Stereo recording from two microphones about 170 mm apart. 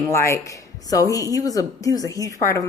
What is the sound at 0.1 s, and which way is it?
A woman's voice, 15° left (ahead or behind).